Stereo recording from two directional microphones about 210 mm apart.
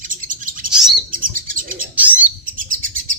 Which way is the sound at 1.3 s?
40° right (ahead or behind).